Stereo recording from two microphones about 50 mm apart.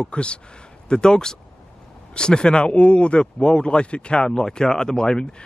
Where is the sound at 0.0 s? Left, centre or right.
Left.